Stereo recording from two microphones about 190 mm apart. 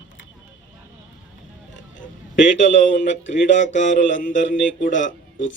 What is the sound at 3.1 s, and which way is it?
Mantra, 70° left (ahead or behind).